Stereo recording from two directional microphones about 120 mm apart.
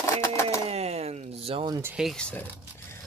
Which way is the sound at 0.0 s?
25° left (ahead or behind).